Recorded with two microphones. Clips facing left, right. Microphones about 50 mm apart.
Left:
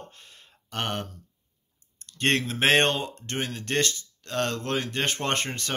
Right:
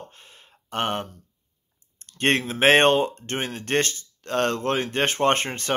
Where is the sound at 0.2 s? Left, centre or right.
Centre.